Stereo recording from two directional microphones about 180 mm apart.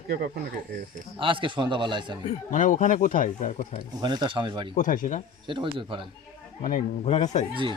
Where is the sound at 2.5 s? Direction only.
45° left (ahead or behind).